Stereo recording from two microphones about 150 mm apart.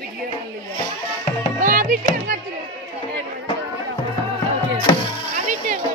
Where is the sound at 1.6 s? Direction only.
65° right (ahead or behind).